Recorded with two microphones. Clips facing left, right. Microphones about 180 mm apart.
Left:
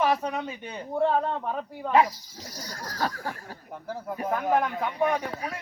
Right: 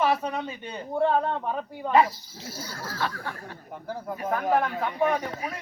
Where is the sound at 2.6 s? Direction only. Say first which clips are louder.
Left 1 dB; 40° left (ahead or behind).